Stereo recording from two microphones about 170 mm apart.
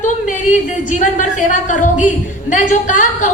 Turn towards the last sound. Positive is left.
turn(degrees=45)  # may be behind; listen again after turning